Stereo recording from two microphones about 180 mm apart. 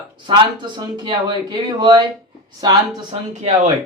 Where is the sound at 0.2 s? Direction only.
25° right (ahead or behind).